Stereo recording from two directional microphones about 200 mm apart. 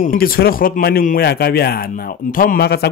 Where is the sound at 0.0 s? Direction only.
45° left (ahead or behind).